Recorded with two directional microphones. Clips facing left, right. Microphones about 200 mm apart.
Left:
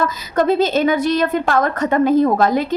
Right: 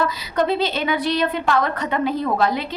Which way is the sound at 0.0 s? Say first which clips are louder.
Left 3 dB; 45° left (ahead or behind).